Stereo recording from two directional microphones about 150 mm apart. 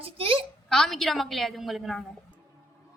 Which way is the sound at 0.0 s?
40° right (ahead or behind).